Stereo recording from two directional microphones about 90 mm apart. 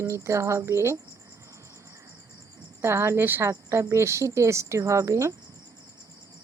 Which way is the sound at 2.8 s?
30° right (ahead or behind).